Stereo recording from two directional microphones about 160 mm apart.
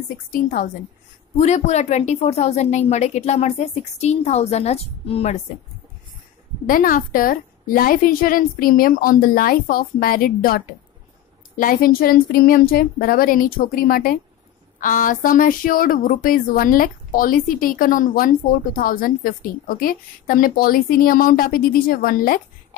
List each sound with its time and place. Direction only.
0.3 s speech: 60° left (ahead or behind)
1.4 s a woman's voice: 45° left (ahead or behind)
6.7 s speech: 60° left (ahead or behind)